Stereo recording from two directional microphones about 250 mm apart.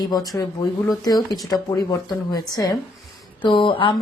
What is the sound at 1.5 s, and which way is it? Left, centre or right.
A woman's voice, centre.